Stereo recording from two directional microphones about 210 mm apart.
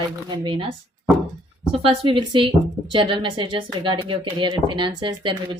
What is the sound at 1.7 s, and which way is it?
Speech, 25° right (ahead or behind).